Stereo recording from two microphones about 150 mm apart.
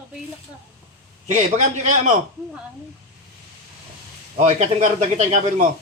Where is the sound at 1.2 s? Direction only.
50° right (ahead or behind).